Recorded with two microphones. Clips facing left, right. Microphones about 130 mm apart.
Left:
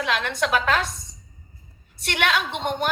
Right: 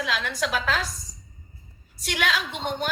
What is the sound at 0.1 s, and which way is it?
Speech, 60° left (ahead or behind).